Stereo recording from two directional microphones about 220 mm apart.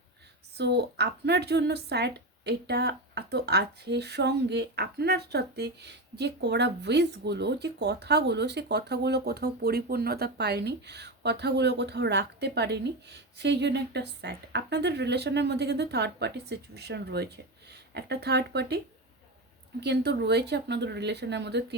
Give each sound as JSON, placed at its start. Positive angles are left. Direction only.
{"t": 0.5, "sound": "speech", "side_deg": -50}
{"t": 19.8, "sound": "speech", "side_deg": -50}